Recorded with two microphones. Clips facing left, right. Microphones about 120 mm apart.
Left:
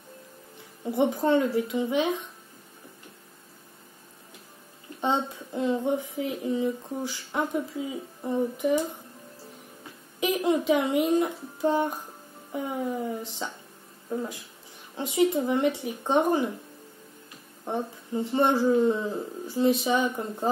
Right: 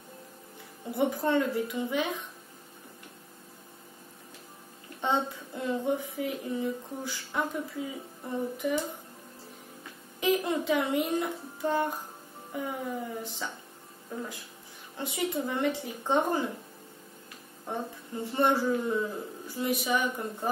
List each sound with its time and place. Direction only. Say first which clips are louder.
0.6 s speech: left 4 dB; 20° left (ahead or behind)
5.0 s speech: left 2 dB; 20° left (ahead or behind)
10.2 s speech: left 3 dB; 20° left (ahead or behind)
15.0 s speech: left 8 dB; 20° left (ahead or behind)
17.6 s speech: left 5 dB; 20° left (ahead or behind)